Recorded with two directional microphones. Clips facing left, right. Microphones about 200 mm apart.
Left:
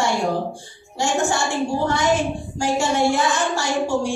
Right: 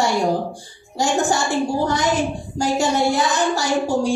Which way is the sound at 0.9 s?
40° right (ahead or behind).